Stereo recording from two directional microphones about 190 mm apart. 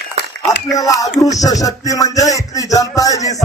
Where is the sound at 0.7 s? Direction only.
20° left (ahead or behind).